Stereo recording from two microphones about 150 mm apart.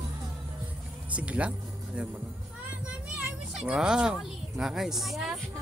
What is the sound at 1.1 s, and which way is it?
Music, 10° right (ahead or behind).